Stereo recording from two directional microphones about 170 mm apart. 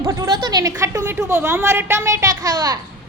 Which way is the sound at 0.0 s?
20° right (ahead or behind).